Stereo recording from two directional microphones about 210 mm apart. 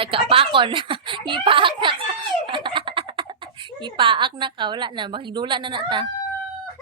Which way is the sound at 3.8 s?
20° right (ahead or behind).